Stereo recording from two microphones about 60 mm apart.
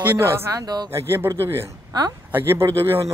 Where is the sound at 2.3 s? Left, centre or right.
Right.